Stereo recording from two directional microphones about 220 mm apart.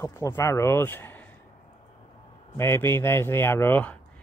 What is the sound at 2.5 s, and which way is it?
Speech, 10° left (ahead or behind).